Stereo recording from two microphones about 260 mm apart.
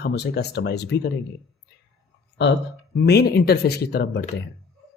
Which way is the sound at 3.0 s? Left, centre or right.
Left.